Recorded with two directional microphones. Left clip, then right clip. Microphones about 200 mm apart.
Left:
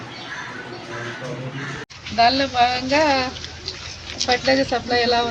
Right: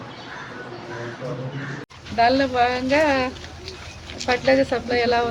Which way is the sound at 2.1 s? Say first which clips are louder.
Left 1 dB; 30° right (ahead or behind).